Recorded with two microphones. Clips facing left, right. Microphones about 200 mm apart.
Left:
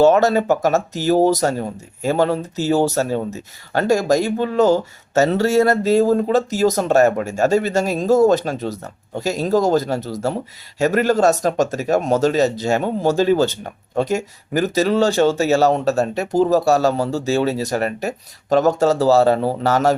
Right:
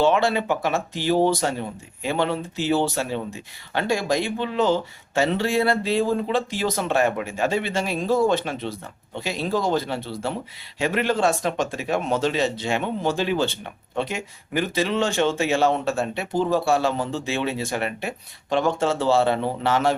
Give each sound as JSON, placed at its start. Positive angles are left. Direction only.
{"t": 0.0, "sound": "speech", "side_deg": 40}